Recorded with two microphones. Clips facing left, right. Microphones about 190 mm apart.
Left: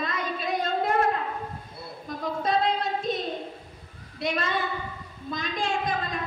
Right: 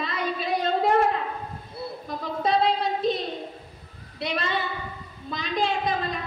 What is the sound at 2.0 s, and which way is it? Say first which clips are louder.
Female singing: even; 50° left (ahead or behind).